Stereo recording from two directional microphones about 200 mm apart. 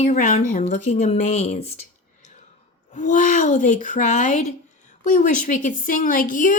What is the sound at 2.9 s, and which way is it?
Speech, 40° left (ahead or behind).